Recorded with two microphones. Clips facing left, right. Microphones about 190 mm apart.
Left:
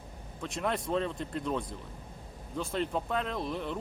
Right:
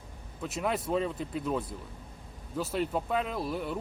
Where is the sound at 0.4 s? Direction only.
5° right (ahead or behind).